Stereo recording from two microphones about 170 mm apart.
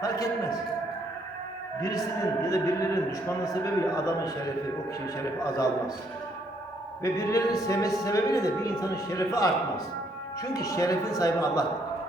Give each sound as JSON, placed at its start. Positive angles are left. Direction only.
{"t": 0.0, "sound": "a man's voice", "side_deg": 20}
{"t": 1.8, "sound": "a man's voice", "side_deg": 20}
{"t": 7.0, "sound": "a man's voice", "side_deg": 20}